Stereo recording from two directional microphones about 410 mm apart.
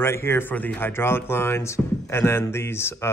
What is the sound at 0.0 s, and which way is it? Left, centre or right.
A man's voice, centre.